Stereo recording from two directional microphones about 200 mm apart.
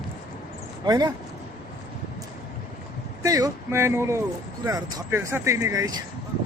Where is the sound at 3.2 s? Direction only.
15° right (ahead or behind).